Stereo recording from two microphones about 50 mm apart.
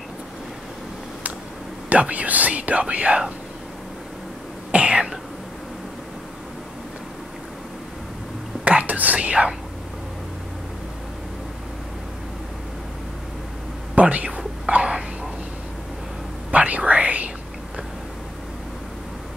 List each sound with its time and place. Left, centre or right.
1.9 s speech: right
4.6 s cough: right
8.6 s whispering: right
13.9 s speech: right
16.5 s whispering: right